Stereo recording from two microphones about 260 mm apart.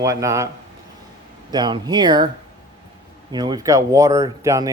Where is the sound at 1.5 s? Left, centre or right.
Centre.